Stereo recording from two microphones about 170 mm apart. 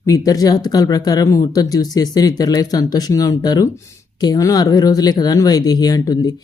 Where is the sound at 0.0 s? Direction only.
20° left (ahead or behind).